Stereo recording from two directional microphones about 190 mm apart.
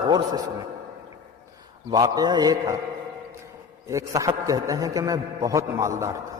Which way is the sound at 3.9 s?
15° right (ahead or behind).